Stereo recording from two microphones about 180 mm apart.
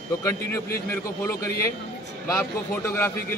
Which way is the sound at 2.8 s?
15° left (ahead or behind).